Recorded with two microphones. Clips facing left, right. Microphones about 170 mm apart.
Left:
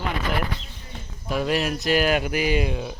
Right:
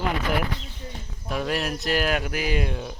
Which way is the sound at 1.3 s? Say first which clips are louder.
Left 3 dB; 5° left (ahead or behind).